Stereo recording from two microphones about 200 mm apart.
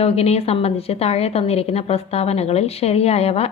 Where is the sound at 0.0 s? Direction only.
30° left (ahead or behind).